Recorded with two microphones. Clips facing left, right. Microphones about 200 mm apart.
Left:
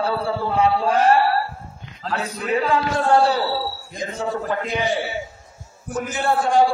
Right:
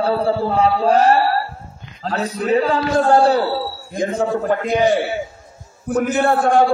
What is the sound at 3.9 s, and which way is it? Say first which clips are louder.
A man's voice: right 8 dB; 50° right (ahead or behind).